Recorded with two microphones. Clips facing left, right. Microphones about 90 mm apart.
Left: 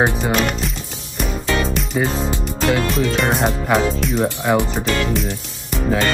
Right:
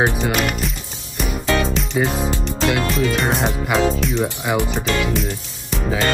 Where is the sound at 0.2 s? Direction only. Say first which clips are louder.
Left 1 dB; 5° right (ahead or behind).